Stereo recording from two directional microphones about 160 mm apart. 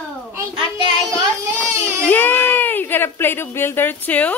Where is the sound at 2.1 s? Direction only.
10° left (ahead or behind).